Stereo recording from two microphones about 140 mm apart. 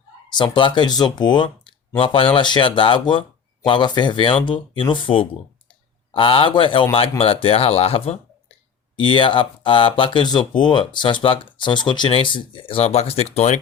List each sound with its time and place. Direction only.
0.3 s speech: 35° left (ahead or behind); by 13.6 s 50° left (ahead or behind)